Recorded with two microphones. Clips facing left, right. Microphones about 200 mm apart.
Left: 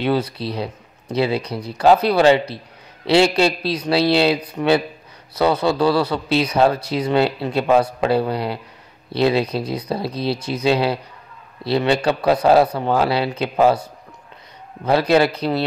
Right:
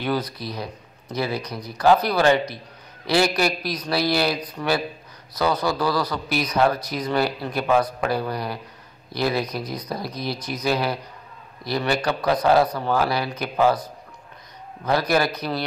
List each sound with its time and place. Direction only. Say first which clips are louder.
0.0 s a man's voice: left 5 dB; 25° left (ahead or behind)
3.1 s a man's voice: left 5 dB; 25° left (ahead or behind)
14.9 s a man's voice: left 5 dB; 25° left (ahead or behind)